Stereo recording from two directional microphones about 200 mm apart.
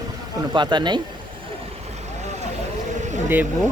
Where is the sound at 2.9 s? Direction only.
35° right (ahead or behind).